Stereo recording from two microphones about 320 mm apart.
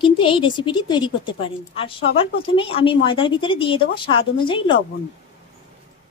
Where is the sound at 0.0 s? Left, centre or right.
Centre.